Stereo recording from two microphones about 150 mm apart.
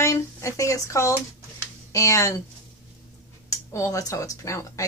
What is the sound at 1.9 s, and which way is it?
Speech, 20° left (ahead or behind).